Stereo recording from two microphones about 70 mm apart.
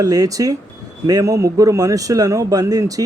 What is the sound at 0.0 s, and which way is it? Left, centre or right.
A man's voice, right.